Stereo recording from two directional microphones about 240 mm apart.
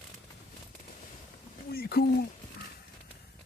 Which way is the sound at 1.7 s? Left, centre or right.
Left.